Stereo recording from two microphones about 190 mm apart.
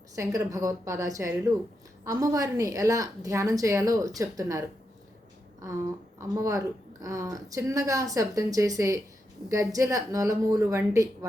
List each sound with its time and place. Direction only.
0.2 s speech: 15° right (ahead or behind)
5.6 s speech: 15° right (ahead or behind)